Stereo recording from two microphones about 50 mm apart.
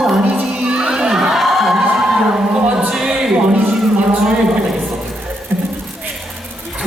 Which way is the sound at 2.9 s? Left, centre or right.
Centre.